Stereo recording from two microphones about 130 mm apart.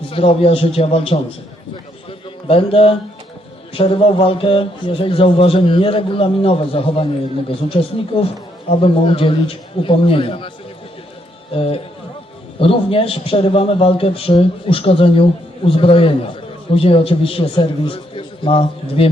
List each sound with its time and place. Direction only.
0.1 s a man's voice: 45° left (ahead or behind)
2.0 s a sound: 45° left (ahead or behind)
3.8 s a man's voice: 45° left (ahead or behind)
11.5 s a man's voice: 45° left (ahead or behind)